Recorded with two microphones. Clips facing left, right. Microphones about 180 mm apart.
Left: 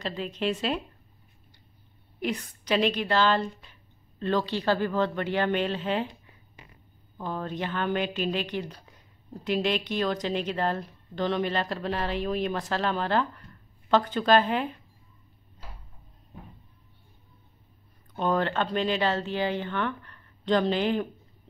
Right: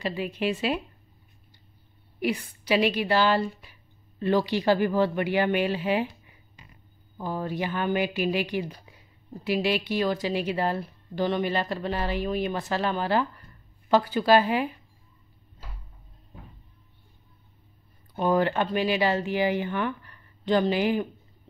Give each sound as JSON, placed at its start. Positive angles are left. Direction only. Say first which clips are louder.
{"t": 0.0, "sound": "speech", "louder": "right 2 dB", "side_deg": -10}
{"t": 2.1, "sound": "a woman's voice", "louder": "right 3 dB", "side_deg": -10}
{"t": 18.1, "sound": "speech", "louder": "right 3 dB", "side_deg": -10}